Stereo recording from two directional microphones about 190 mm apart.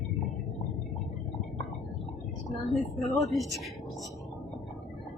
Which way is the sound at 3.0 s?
Centre (ahead or behind).